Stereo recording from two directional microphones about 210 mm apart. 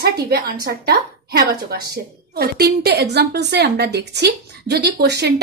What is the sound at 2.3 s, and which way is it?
A woman's voice, 50° right (ahead or behind).